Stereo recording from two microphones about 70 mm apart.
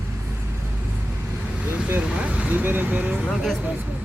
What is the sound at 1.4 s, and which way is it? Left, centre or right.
Vehicle, centre.